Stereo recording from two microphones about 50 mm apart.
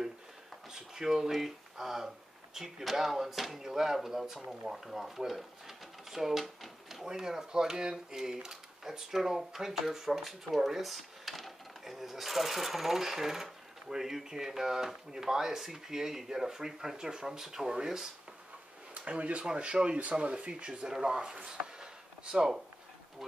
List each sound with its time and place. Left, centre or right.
0.7 s speech: centre
18.9 s speech: right